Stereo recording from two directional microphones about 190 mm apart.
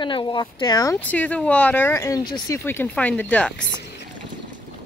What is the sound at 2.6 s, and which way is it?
Speech, 10° left (ahead or behind).